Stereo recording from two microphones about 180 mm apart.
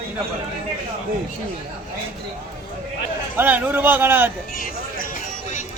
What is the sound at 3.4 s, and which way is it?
Speech, 10° right (ahead or behind).